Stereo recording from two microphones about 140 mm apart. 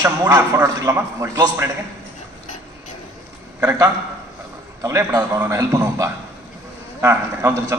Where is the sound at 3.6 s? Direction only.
20° right (ahead or behind).